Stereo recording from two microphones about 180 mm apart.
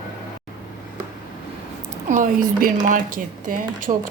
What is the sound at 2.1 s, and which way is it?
Speech, 45° right (ahead or behind).